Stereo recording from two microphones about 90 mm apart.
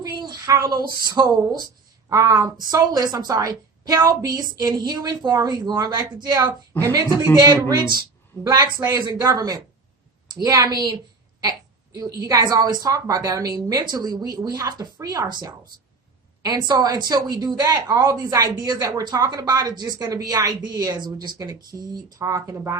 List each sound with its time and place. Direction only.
0.0 s a sound: 50° right (ahead or behind)
0.7 s speech: 50° right (ahead or behind)
6.7 s speech: 20° left (ahead or behind)
7.4 s speech: 45° right (ahead or behind)
11.9 s speech: 40° right (ahead or behind)
16.4 s speech: 50° right (ahead or behind)
17.9 s speech: 35° right (ahead or behind); by 21.3 s 55° right (ahead or behind)
21.3 s speech: 45° right (ahead or behind)